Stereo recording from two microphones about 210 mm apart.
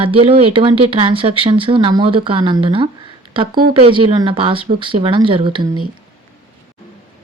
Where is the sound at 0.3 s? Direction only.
25° right (ahead or behind).